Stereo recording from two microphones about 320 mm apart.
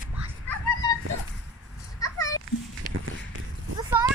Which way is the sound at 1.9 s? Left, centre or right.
Centre.